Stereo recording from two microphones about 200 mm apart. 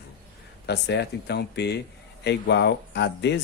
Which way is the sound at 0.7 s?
55° left (ahead or behind).